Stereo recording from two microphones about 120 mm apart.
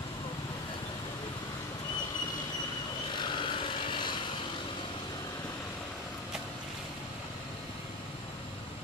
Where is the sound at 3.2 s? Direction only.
40° left (ahead or behind).